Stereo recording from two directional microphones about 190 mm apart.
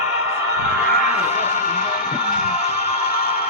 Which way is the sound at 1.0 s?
35° left (ahead or behind).